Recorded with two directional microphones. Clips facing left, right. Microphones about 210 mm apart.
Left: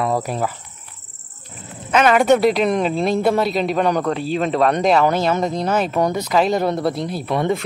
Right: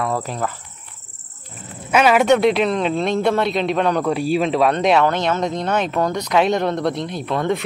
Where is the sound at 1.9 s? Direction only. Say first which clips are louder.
Even; 5° right (ahead or behind).